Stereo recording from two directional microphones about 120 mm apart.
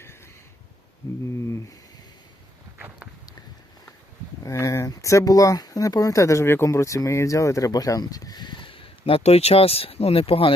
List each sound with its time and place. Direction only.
4.4 s speech: 25° left (ahead or behind); by 10.5 s 50° left (ahead or behind)